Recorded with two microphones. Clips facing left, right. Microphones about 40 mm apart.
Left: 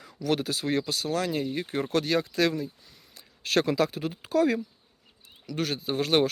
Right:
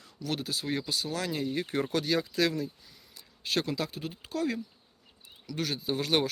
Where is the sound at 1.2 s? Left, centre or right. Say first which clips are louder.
Left 3 dB; left.